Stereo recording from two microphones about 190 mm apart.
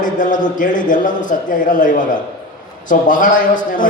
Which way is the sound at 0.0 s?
45° left (ahead or behind).